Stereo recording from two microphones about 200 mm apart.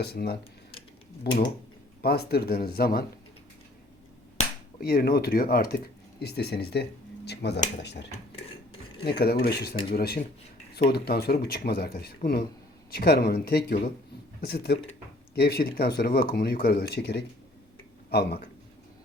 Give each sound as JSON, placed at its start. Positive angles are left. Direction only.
{"t": 0.0, "sound": "speech", "side_deg": 55}
{"t": 2.0, "sound": "speech", "side_deg": 50}
{"t": 4.8, "sound": "speech", "side_deg": 50}
{"t": 9.1, "sound": "speech", "side_deg": 50}